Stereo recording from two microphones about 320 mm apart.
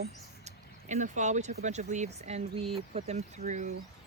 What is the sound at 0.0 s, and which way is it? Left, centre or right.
Speech, right.